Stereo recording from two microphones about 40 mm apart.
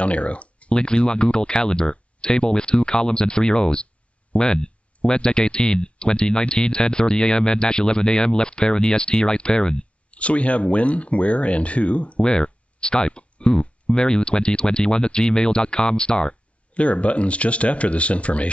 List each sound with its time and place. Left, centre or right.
0.0 s speech: left
0.7 s speech: left
10.1 s speech: left
12.3 s speech: left